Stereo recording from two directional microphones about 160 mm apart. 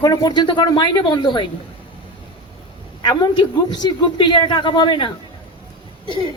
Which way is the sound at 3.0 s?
25° left (ahead or behind).